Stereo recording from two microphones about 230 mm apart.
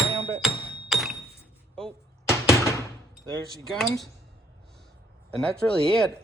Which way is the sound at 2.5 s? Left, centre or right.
Centre.